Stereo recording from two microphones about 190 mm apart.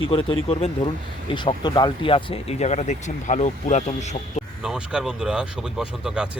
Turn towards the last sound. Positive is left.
turn(degrees=-5)  # may be behind; listen again after turning